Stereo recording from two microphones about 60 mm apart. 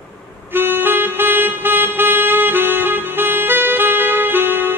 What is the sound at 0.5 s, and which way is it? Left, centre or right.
Music, right.